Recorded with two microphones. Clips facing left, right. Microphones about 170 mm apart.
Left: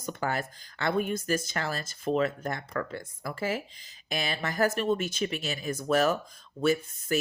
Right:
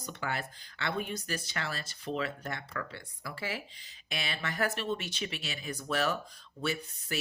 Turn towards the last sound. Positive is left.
turn(degrees=45)  # may be behind; listen again after turning